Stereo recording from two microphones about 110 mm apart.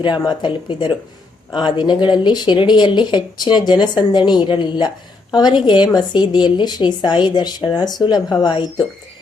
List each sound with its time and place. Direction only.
0.0 s a woman's voice: 40° left (ahead or behind)